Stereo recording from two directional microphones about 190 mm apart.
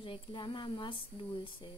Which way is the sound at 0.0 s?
25° left (ahead or behind).